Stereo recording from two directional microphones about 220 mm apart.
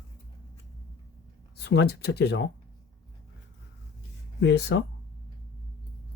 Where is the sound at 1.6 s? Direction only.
50° left (ahead or behind).